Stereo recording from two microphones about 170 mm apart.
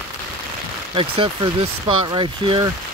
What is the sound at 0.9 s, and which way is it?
Speech, 30° right (ahead or behind).